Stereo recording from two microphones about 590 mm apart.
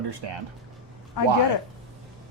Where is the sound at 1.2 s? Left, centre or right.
Left.